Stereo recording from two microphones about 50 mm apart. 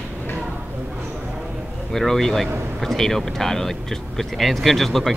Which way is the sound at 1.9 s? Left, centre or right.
Centre.